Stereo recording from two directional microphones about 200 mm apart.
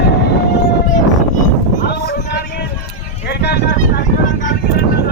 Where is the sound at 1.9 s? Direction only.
55° left (ahead or behind).